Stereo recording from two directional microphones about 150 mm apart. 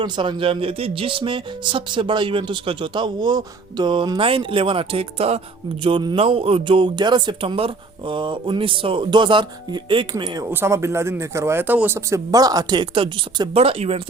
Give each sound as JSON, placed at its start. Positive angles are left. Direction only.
{"t": 0.0, "sound": "speech", "side_deg": -30}
{"t": 5.8, "sound": "speech", "side_deg": -30}
{"t": 10.5, "sound": "speech", "side_deg": -15}